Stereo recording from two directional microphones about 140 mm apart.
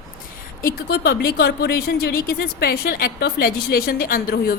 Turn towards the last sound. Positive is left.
turn(degrees=90)